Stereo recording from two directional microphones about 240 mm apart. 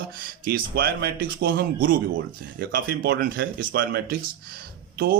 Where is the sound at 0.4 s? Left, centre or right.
Right.